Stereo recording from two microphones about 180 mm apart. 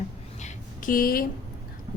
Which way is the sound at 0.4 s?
50° left (ahead or behind).